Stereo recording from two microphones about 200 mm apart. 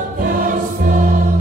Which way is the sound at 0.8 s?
40° right (ahead or behind).